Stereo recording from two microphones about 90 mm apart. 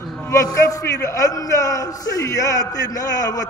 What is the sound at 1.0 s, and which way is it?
A man's voice, 40° left (ahead or behind).